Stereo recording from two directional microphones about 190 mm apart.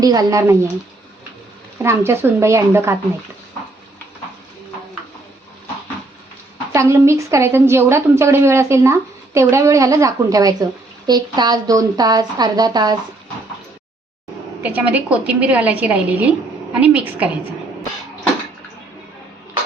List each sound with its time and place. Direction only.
0.0 s a woman's voice: 20° right (ahead or behind)
1.8 s a woman's voice: 15° right (ahead or behind)
6.7 s a woman's voice: 15° right (ahead or behind)
14.6 s a woman's voice: 10° right (ahead or behind)